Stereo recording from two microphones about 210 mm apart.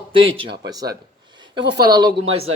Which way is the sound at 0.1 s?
25° right (ahead or behind).